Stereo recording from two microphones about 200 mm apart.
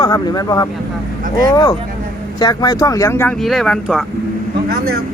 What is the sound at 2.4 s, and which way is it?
Speech, 20° left (ahead or behind).